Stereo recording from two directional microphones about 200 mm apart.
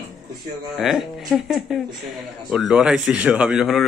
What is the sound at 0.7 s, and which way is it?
Speech, centre (ahead or behind).